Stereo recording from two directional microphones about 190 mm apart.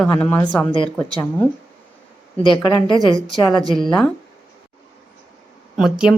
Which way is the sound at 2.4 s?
25° left (ahead or behind).